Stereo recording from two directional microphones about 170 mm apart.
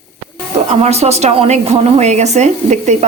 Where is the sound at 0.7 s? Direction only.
40° right (ahead or behind).